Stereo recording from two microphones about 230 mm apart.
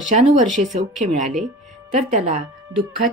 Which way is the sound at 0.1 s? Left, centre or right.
Right.